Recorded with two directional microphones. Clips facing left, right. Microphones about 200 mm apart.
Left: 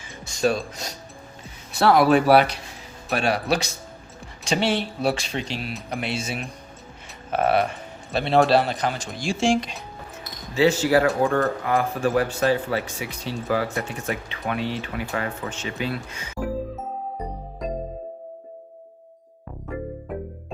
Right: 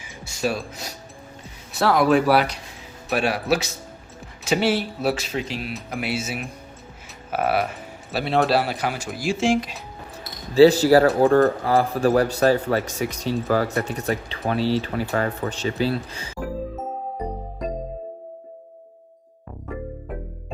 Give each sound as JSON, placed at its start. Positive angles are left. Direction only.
{"t": 0.0, "sound": "mechanisms", "side_deg": -5}
{"t": 2.0, "sound": "speech", "side_deg": 0}
{"t": 10.5, "sound": "a man's voice", "side_deg": -35}
{"t": 16.7, "sound": "music", "side_deg": 0}
{"t": 19.7, "sound": "music", "side_deg": 0}